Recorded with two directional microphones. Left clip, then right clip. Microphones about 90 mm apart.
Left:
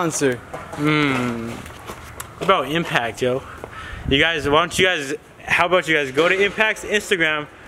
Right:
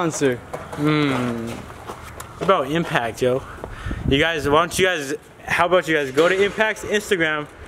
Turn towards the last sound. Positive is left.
turn(degrees=-5)  # may be behind; listen again after turning